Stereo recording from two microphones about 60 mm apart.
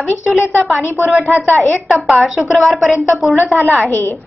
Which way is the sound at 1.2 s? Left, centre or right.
Right.